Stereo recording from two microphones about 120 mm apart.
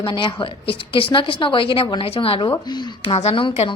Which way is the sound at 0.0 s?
40° left (ahead or behind).